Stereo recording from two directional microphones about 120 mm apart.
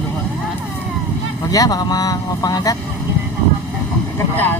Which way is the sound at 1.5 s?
30° left (ahead or behind).